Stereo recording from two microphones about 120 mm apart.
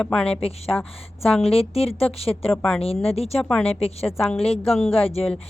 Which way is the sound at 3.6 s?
55° left (ahead or behind).